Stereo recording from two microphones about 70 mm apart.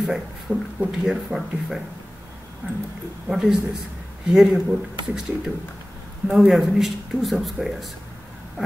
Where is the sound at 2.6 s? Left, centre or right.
Right.